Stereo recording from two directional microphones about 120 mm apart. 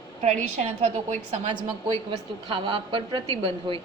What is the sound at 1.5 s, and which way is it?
A woman's voice, 45° right (ahead or behind).